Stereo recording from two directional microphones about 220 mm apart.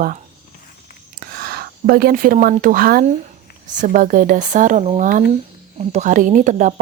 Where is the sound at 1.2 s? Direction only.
45° right (ahead or behind).